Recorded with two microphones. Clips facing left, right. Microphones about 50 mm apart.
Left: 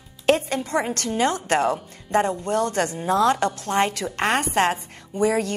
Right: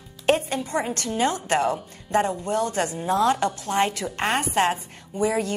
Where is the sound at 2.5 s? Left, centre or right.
Left.